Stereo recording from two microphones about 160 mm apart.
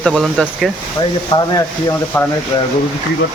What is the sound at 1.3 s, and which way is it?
Speech, 20° left (ahead or behind).